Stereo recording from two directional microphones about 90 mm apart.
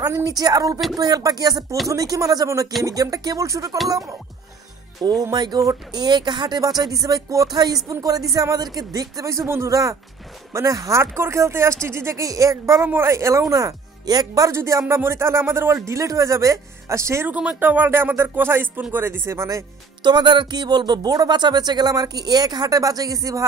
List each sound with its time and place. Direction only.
0.0 s speech: 40° right (ahead or behind)
5.2 s speech: 50° right (ahead or behind)
14.5 s speech: 30° right (ahead or behind)
17.3 s speech: 15° right (ahead or behind); by 19.6 s 30° right (ahead or behind)
20.0 s speech: 55° right (ahead or behind)